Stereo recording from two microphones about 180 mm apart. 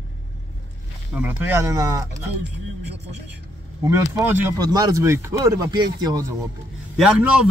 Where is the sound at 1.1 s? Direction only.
10° right (ahead or behind).